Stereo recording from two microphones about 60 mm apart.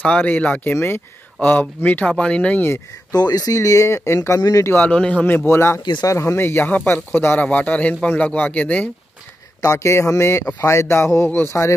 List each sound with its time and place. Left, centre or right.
0.0 s a man's voice: left
0.7 s speech: left
1.4 s a man's voice: left
2.0 s a man's voice: centre
3.1 s speech: left
3.5 s speech: left
4.4 s speech: left
4.7 s a man's voice: left
5.2 s speech: left
5.5 s speech: left
7.4 s a man's voice: left
9.6 s speech: left